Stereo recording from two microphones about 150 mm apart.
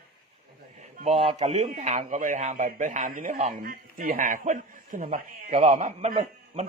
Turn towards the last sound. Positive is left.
turn(degrees=-50)  # may be behind; listen again after turning